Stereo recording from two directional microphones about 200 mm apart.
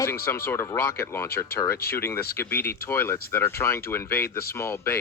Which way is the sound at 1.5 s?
50° left (ahead or behind).